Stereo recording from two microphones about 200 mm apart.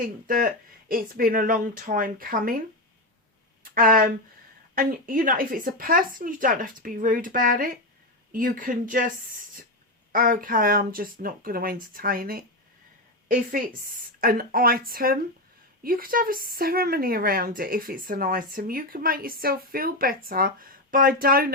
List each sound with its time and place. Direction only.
0.3 s speech: 45° right (ahead or behind)
3.6 s speech: 45° right (ahead or behind)